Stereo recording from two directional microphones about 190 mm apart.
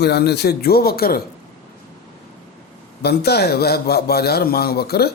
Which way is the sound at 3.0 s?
60° left (ahead or behind).